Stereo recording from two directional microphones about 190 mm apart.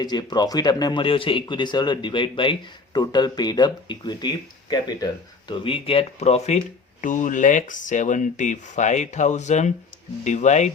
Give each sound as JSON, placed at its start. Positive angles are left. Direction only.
{"t": 0.0, "sound": "speech", "side_deg": 20}